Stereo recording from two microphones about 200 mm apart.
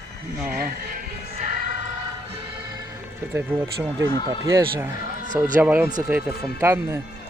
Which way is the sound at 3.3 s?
10° right (ahead or behind).